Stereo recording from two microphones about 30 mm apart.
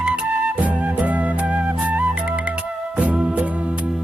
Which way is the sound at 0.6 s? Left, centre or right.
Right.